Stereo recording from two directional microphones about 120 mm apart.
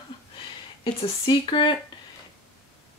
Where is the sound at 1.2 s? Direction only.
40° left (ahead or behind).